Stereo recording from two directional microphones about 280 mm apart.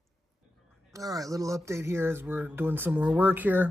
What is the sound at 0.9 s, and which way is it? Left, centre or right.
Speech, centre.